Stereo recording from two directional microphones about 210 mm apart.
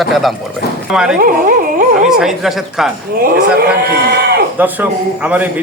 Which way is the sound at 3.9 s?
50° right (ahead or behind).